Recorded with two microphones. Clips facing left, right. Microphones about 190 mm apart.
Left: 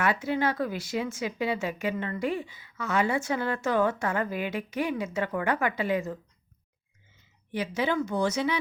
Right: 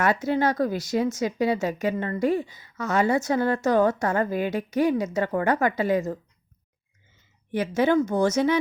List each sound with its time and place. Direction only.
0.0 s speech: 40° right (ahead or behind)
7.5 s speech: 50° right (ahead or behind)